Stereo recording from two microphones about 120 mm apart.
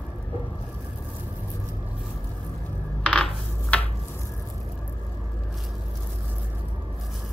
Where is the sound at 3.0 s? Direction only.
10° left (ahead or behind).